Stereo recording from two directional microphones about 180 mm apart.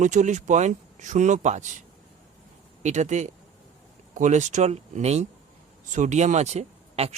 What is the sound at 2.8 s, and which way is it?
Speech, 40° right (ahead or behind).